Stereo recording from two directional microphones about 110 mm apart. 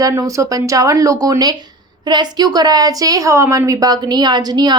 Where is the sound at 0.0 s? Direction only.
30° right (ahead or behind).